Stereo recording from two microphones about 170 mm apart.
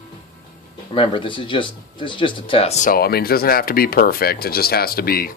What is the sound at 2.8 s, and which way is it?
Speech, 60° left (ahead or behind).